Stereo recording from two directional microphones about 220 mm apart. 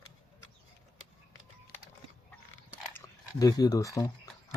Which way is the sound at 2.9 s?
15° left (ahead or behind).